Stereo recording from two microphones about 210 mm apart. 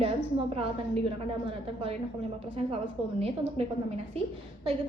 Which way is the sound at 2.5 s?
25° right (ahead or behind).